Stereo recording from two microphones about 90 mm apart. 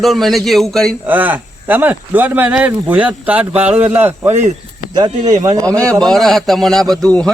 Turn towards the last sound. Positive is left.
turn(degrees=5)  # may be behind; listen again after turning